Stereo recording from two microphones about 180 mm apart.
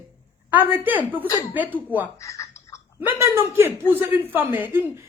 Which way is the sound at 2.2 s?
15° left (ahead or behind).